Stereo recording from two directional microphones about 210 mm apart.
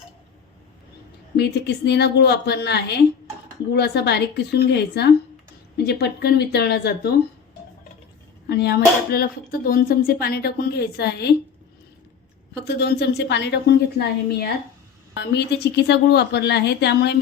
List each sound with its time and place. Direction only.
1.4 s speech: 50° left (ahead or behind)
8.4 s speech: 50° left (ahead or behind)
12.5 s speech: 50° left (ahead or behind)